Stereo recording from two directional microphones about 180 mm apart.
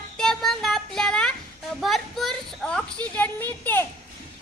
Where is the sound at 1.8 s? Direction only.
Centre (ahead or behind).